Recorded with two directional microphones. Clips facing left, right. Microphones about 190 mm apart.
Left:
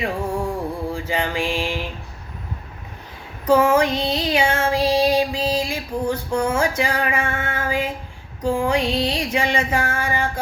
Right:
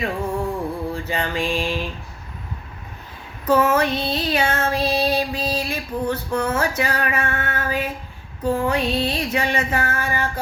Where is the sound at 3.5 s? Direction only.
10° left (ahead or behind).